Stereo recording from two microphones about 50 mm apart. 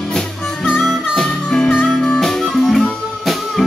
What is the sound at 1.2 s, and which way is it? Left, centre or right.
Music, centre.